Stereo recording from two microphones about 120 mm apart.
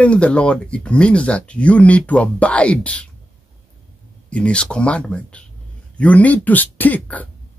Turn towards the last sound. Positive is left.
turn(degrees=15)  # may be behind; listen again after turning